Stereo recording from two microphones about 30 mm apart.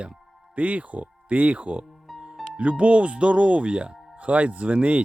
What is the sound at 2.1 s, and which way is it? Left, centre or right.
Music, centre.